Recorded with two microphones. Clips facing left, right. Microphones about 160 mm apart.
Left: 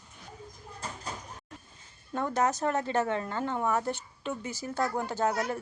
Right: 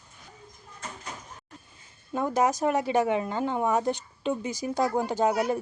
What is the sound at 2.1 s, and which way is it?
Speech, 10° right (ahead or behind).